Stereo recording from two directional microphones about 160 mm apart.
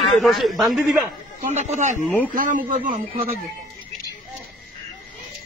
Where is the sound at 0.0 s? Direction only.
Centre (ahead or behind).